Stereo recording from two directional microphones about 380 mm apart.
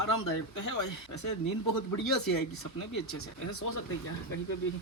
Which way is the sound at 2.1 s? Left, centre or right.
Left.